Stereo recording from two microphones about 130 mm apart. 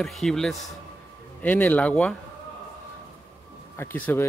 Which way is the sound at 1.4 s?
15° left (ahead or behind).